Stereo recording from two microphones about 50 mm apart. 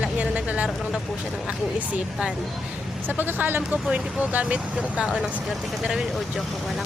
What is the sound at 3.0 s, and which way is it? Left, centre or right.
Speech, right.